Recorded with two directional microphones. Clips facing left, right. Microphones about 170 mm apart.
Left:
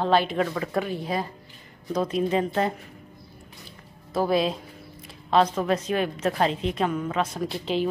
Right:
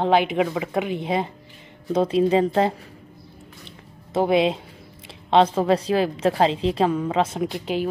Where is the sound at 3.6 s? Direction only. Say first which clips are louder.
Right 2 dB; 20° right (ahead or behind).